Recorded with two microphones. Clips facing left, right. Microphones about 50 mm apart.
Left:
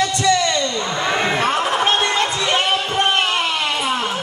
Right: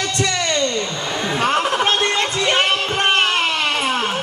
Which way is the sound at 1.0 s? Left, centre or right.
Left.